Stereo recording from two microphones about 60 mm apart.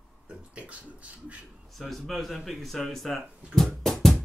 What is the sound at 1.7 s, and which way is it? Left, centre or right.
Speech, centre.